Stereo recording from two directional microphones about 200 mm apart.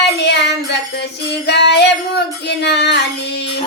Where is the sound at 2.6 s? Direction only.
55° left (ahead or behind).